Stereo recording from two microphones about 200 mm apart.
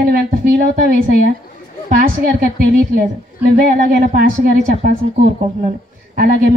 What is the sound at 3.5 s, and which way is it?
Speech, 45° right (ahead or behind).